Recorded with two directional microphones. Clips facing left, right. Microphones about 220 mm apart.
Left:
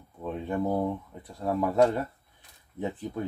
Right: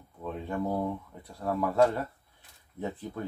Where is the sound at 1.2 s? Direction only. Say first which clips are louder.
Left 2 dB; 20° left (ahead or behind).